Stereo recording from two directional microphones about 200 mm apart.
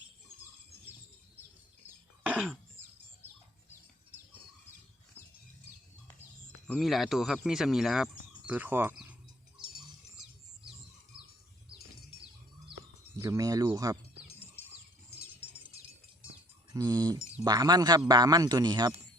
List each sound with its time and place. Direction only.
2.2 s cough: 5° right (ahead or behind)
6.7 s speech: centre (ahead or behind)
13.1 s speech: 15° right (ahead or behind)
16.7 s speech: 20° right (ahead or behind)